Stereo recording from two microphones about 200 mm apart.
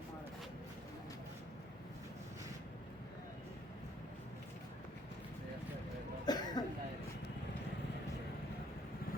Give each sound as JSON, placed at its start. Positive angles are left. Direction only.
{"t": 6.2, "sound": "cough", "side_deg": 20}